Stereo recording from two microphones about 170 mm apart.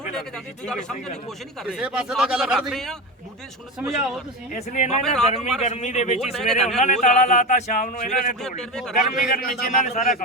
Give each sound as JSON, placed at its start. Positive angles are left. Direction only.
{"t": 0.2, "sound": "a man's voice", "side_deg": 5}
{"t": 4.5, "sound": "speech", "side_deg": 45}
{"t": 6.3, "sound": "a man's voice", "side_deg": 5}
{"t": 6.7, "sound": "speech", "side_deg": 45}
{"t": 8.4, "sound": "a man's voice", "side_deg": 5}
{"t": 9.1, "sound": "speech", "side_deg": 55}